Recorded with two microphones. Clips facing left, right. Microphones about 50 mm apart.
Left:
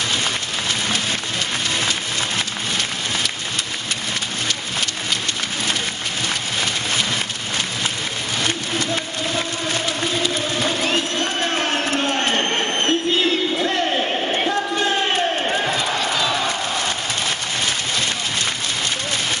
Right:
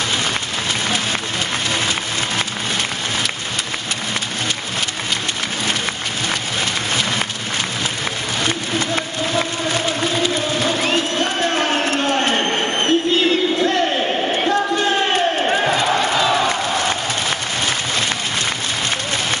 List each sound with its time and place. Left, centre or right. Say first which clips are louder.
11.5 s a sound: right 2 dB; centre
15.4 s crowd: right 4 dB; right
16.4 s crowd: right 4 dB; right